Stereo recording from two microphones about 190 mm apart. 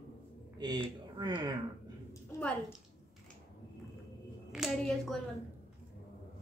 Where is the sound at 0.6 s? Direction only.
25° right (ahead or behind).